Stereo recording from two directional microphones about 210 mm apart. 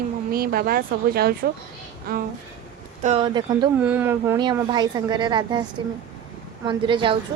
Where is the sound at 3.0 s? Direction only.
25° right (ahead or behind).